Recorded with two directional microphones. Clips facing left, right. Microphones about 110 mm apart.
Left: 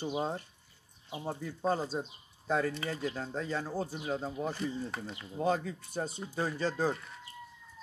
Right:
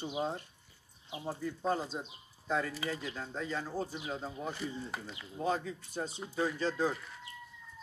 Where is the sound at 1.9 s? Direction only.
45° left (ahead or behind).